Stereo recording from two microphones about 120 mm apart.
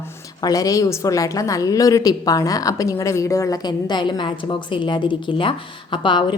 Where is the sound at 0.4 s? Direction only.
30° left (ahead or behind).